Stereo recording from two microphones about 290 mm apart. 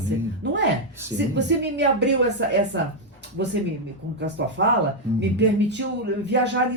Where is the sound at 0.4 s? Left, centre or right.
Right.